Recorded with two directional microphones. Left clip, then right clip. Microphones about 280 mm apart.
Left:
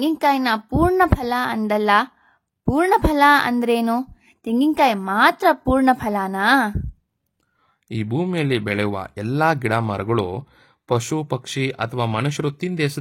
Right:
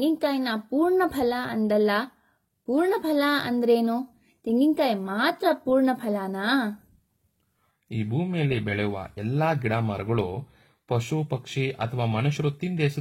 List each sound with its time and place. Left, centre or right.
0.2 s speech: left
7.9 s speech: left